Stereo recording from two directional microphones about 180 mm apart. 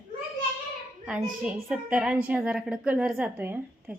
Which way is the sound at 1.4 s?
5° right (ahead or behind).